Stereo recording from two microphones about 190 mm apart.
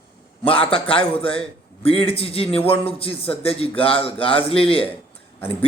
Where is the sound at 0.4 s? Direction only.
30° left (ahead or behind).